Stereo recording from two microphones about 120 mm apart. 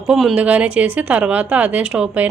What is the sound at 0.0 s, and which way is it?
Speech, 5° right (ahead or behind).